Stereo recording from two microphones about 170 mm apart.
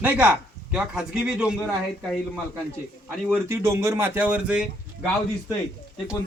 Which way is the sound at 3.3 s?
15° right (ahead or behind).